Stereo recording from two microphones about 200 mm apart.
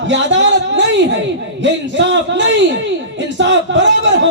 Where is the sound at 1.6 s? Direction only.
65° right (ahead or behind).